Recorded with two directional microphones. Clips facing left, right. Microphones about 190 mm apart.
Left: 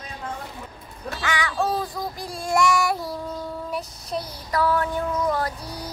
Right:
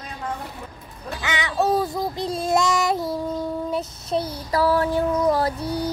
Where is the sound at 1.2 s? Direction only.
20° right (ahead or behind).